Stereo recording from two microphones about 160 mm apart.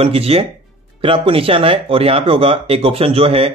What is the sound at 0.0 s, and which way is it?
Speech, 40° right (ahead or behind).